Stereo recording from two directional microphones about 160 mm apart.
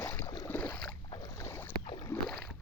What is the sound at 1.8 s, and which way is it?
Rowboat, 25° left (ahead or behind).